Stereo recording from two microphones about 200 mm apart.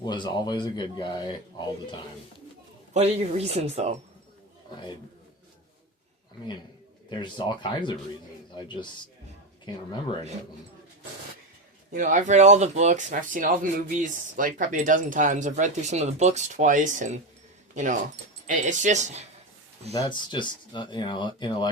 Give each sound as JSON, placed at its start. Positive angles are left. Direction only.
{"t": 0.0, "sound": "a man's voice", "side_deg": 20}
{"t": 2.9, "sound": "speech", "side_deg": -30}
{"t": 7.1, "sound": "a man's voice", "side_deg": 20}
{"t": 11.9, "sound": "speech", "side_deg": -40}
{"t": 18.4, "sound": "speech", "side_deg": -40}
{"t": 19.9, "sound": "a man's voice", "side_deg": 20}